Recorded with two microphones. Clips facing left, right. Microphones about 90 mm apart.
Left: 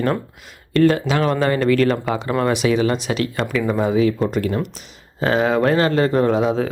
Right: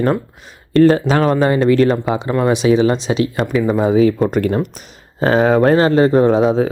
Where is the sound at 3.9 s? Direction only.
40° right (ahead or behind).